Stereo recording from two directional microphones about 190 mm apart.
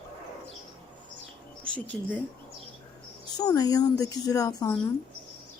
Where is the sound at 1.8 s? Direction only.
10° left (ahead or behind).